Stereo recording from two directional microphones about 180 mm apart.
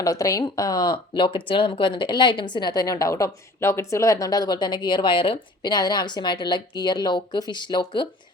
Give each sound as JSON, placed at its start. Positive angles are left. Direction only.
{"t": 0.0, "sound": "speech", "side_deg": 20}